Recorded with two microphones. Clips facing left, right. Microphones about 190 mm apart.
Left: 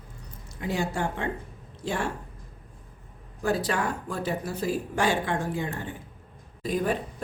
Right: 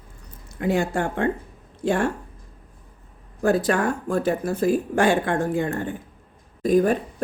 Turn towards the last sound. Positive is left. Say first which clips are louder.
# right 9 dB
turn(degrees=-45)  # may be behind; listen again after turning